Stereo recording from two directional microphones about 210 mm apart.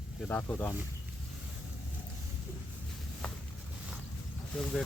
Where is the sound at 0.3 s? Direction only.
10° left (ahead or behind).